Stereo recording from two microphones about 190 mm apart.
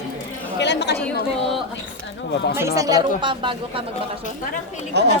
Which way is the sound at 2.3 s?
65° left (ahead or behind).